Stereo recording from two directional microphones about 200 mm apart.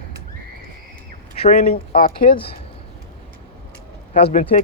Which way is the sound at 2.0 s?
45° left (ahead or behind).